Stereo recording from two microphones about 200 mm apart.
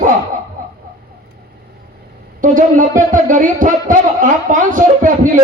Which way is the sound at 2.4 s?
40° right (ahead or behind).